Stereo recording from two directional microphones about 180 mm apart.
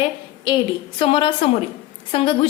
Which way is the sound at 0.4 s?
30° left (ahead or behind).